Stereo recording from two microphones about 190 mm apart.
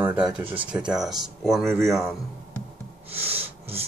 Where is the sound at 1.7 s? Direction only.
15° right (ahead or behind).